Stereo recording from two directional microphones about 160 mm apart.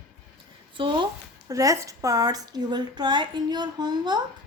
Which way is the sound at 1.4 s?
20° right (ahead or behind).